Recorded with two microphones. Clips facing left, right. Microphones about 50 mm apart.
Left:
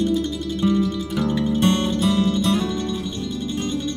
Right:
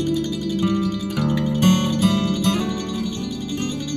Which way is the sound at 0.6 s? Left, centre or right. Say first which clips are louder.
Left 3 dB; right.